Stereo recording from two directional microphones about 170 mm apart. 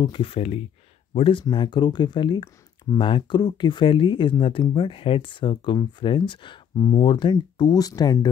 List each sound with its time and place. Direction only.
0.0 s speech: 30° left (ahead or behind)